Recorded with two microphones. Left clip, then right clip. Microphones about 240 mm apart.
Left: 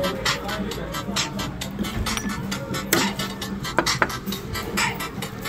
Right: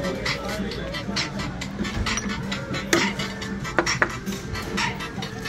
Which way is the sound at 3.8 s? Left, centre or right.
Left.